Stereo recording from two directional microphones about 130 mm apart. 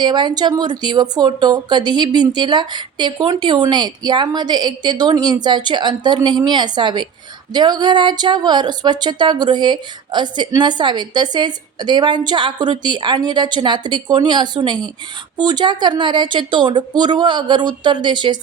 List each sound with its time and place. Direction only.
0.0 s speech: 35° right (ahead or behind)